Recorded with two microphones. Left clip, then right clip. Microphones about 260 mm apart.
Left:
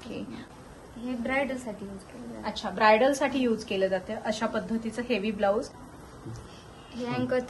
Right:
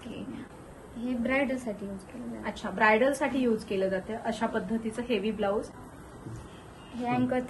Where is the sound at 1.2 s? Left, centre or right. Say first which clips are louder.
Even; centre.